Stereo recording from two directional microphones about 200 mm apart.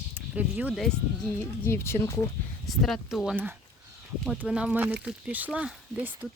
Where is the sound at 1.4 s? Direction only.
10° left (ahead or behind).